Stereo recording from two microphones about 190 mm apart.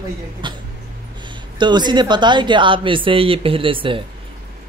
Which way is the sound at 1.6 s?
25° right (ahead or behind).